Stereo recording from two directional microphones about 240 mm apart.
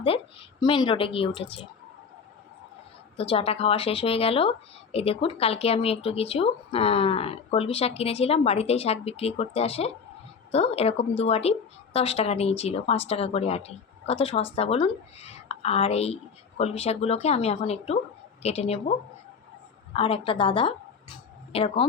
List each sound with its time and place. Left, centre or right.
0.6 s speech: centre
3.3 s speech: left
20.0 s speech: left